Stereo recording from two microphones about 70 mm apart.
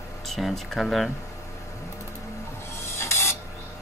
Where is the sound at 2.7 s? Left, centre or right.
Left.